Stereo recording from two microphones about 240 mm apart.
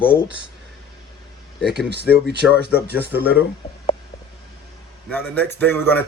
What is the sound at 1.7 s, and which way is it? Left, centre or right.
Speech, right.